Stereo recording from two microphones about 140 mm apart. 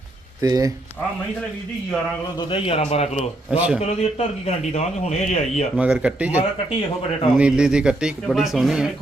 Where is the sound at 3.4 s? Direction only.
10° right (ahead or behind).